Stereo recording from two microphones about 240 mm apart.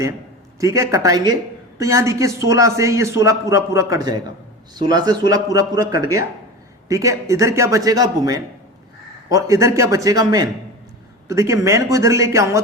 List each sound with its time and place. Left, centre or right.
0.6 s a man's voice: centre